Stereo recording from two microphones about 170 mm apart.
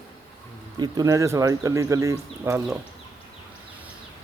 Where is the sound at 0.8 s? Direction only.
20° right (ahead or behind).